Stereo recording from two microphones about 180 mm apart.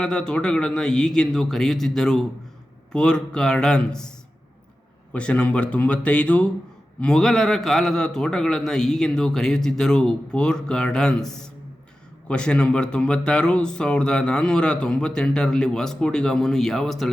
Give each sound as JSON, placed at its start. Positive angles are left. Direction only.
{"t": 0.0, "sound": "speech", "side_deg": 5}
{"t": 5.1, "sound": "speech", "side_deg": 5}